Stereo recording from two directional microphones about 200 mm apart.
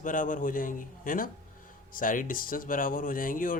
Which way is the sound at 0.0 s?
40° left (ahead or behind).